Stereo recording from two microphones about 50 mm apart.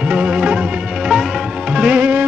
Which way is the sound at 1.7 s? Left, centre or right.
Right.